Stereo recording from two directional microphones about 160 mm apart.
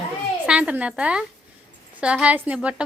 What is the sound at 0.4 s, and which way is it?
A woman's voice, 5° right (ahead or behind).